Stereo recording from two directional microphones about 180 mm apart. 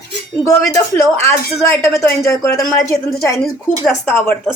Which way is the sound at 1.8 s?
15° left (ahead or behind).